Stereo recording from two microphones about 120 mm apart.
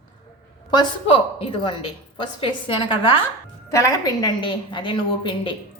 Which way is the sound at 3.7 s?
25° left (ahead or behind).